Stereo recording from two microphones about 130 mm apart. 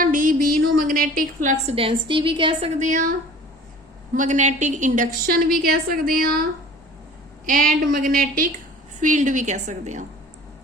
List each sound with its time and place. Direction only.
0.0 s a woman's voice: 90° right
1.6 s a woman's voice: 45° right (ahead or behind)
2.7 s a woman's voice: 70° right (ahead or behind)
5.9 s a woman's voice: 90° right
7.4 s a woman's voice: 90° right
9.0 s a woman's voice: 70° right (ahead or behind)